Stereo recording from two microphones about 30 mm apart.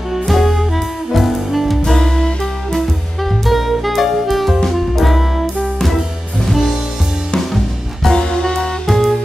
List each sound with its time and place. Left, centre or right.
0.3 s music: centre
1.9 s music: centre
3.4 s music: centre
7.3 s music: centre
8.1 s music: left
8.8 s music: centre